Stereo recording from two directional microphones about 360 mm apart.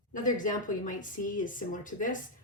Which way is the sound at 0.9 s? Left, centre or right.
Left.